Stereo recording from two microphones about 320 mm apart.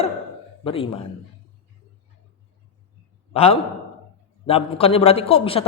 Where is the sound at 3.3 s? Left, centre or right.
Centre.